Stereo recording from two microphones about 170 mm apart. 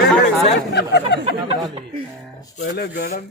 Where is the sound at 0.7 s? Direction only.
85° left.